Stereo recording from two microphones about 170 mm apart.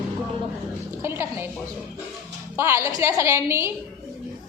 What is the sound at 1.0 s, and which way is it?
Speech, 15° right (ahead or behind).